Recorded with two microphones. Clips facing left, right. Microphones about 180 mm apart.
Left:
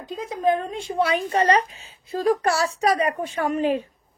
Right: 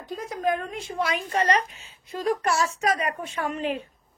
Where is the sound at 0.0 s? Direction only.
20° left (ahead or behind); by 3.8 s 35° left (ahead or behind).